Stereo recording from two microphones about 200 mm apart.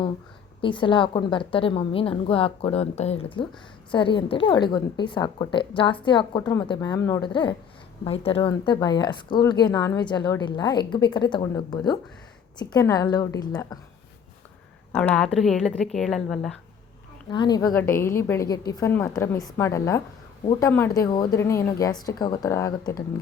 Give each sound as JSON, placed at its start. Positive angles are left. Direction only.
{"t": 0.6, "sound": "speech", "side_deg": 25}
{"t": 14.9, "sound": "a woman's voice", "side_deg": 5}
{"t": 17.3, "sound": "speech", "side_deg": 20}
{"t": 17.7, "sound": "speech", "side_deg": 10}